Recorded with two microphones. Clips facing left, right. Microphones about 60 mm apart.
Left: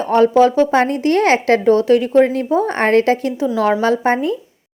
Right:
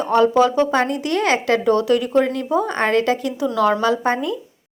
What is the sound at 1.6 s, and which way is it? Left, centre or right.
A woman's voice, left.